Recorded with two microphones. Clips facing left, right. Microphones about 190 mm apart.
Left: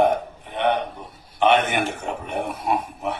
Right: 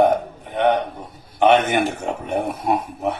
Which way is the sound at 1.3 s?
45° right (ahead or behind).